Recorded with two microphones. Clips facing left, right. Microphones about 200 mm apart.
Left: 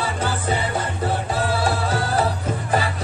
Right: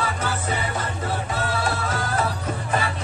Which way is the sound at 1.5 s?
30° left (ahead or behind).